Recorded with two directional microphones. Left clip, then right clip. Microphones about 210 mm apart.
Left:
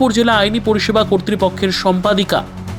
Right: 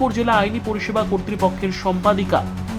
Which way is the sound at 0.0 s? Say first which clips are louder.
Left 5 dB; 25° left (ahead or behind).